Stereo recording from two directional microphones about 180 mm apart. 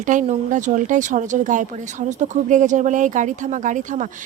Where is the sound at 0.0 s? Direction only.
45° right (ahead or behind).